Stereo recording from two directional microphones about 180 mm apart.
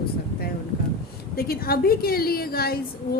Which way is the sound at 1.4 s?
55° left (ahead or behind).